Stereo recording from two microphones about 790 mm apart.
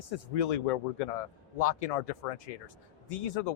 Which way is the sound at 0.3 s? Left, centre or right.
Left.